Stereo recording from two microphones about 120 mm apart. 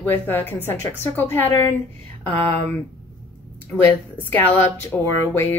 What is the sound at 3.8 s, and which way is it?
Speech, 15° left (ahead or behind).